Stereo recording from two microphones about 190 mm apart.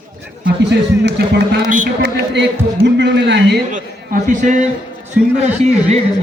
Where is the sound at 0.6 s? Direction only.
65° right (ahead or behind).